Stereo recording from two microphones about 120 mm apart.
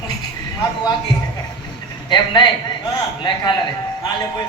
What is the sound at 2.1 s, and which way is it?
A woman's voice, 35° left (ahead or behind).